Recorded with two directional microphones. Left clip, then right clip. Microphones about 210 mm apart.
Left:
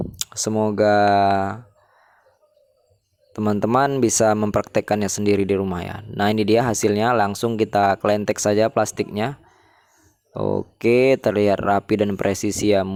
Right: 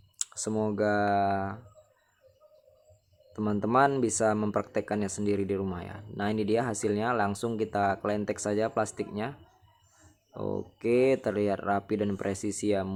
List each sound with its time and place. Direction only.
0.2 s speech: 35° left (ahead or behind)
3.3 s speech: 35° left (ahead or behind)